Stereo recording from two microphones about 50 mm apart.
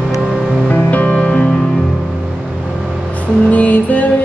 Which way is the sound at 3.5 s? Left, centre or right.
Left.